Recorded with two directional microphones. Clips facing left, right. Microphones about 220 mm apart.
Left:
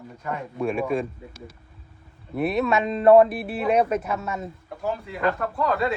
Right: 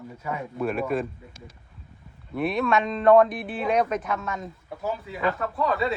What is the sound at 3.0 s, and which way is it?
Speech, 30° left (ahead or behind).